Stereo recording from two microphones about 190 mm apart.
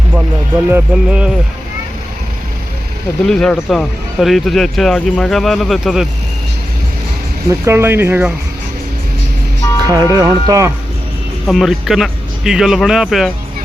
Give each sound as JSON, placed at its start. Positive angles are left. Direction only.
{"t": 0.7, "sound": "speech", "side_deg": -5}
{"t": 3.2, "sound": "speech", "side_deg": 5}
{"t": 7.6, "sound": "speech", "side_deg": -10}
{"t": 9.8, "sound": "speech", "side_deg": -20}
{"t": 11.4, "sound": "speech", "side_deg": 0}